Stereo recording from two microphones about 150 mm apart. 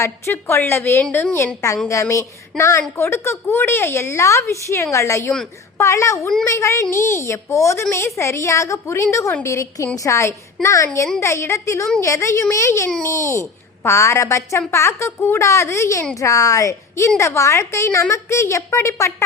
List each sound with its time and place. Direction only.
0.0 s a woman's voice: 15° left (ahead or behind)